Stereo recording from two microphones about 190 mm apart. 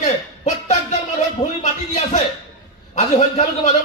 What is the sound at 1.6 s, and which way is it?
A man's voice, 35° left (ahead or behind).